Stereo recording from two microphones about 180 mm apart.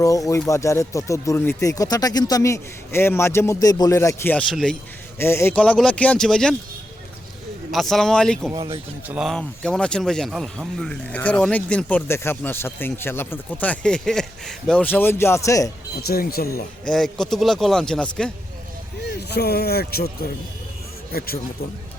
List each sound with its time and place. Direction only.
0.0 s a man's voice: 20° left (ahead or behind); by 6.6 s 5° left (ahead or behind)
7.7 s a man's voice: centre (ahead or behind)
8.5 s speech: 25° right (ahead or behind)
9.0 s speech: 5° right (ahead or behind); by 15.7 s 20° left (ahead or behind)
16.0 s speech: 60° left (ahead or behind)
16.8 s a man's voice: 5° left (ahead or behind)
19.0 s speech: 65° left (ahead or behind)
21.1 s speech: 55° left (ahead or behind)